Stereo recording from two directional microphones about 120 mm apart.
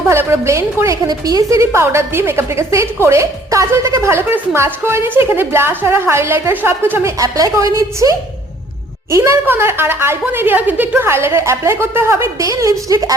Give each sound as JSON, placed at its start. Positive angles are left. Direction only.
{"t": 0.1, "sound": "a woman's voice", "side_deg": -20}
{"t": 7.2, "sound": "a woman's voice", "side_deg": -30}